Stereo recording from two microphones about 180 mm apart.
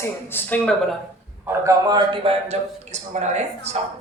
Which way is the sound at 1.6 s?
20° right (ahead or behind).